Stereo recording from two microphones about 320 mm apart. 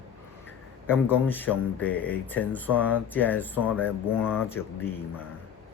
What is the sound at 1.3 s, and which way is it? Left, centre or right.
Speech, centre.